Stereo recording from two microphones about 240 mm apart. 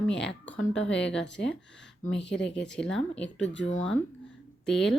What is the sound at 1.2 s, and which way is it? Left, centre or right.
Speech, left.